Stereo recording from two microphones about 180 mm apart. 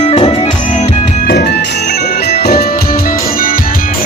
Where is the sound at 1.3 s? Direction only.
65° left (ahead or behind).